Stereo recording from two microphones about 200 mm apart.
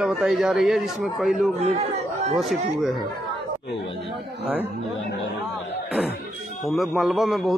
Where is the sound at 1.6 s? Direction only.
30° right (ahead or behind).